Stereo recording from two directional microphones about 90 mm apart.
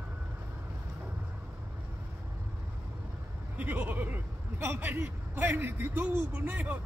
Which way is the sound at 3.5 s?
20° right (ahead or behind).